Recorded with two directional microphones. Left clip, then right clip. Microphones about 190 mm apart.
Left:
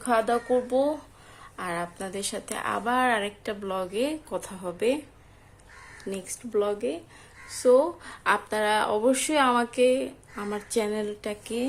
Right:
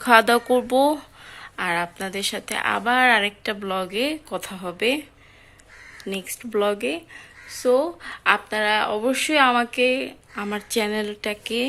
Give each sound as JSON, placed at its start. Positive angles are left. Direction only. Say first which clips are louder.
{"t": 0.0, "sound": "speech", "louder": "right 8 dB", "side_deg": -15}
{"t": 6.0, "sound": "speech", "louder": "right 5 dB", "side_deg": -5}
{"t": 7.5, "sound": "speech", "louder": "even", "side_deg": 0}